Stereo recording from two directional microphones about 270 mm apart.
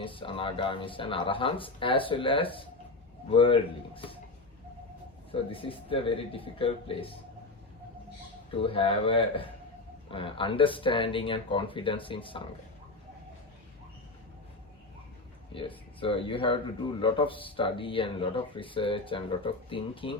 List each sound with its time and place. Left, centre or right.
0.0 s speech: centre
5.3 s speech: centre
8.5 s speech: centre
15.5 s speech: centre